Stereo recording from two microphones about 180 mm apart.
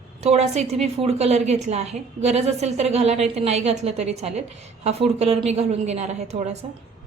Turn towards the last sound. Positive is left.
turn(degrees=-40)  # may be behind; listen again after turning